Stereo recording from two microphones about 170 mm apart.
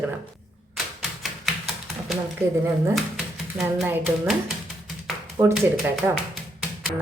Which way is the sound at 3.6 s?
10° right (ahead or behind).